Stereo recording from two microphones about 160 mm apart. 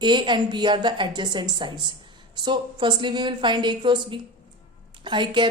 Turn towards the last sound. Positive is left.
turn(degrees=-30)  # may be behind; listen again after turning